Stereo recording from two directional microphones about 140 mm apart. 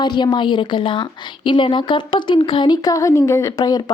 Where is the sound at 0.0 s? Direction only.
30° left (ahead or behind).